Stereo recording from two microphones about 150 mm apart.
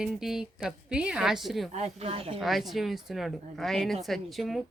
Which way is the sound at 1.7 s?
45° right (ahead or behind).